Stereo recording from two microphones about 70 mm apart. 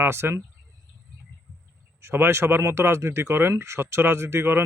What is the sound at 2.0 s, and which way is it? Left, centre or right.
Speech, right.